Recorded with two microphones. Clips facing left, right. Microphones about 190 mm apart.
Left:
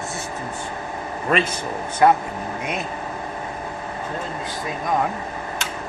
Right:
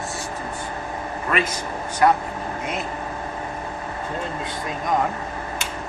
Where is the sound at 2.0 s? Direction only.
20° left (ahead or behind).